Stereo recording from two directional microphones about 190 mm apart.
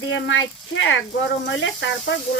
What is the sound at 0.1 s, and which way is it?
Speech, 80° left.